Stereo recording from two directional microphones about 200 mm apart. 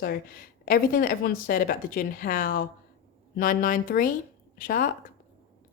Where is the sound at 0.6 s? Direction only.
45° left (ahead or behind).